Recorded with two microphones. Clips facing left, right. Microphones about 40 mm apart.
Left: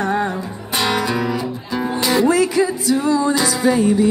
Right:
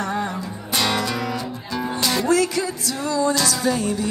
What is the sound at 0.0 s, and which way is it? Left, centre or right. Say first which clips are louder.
Music: left 5 dB; left.